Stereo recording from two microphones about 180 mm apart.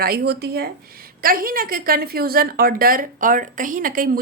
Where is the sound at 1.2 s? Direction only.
50° right (ahead or behind).